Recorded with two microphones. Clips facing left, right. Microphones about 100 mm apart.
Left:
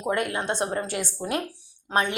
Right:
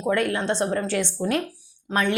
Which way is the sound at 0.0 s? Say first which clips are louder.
Right 3 dB; 15° left (ahead or behind).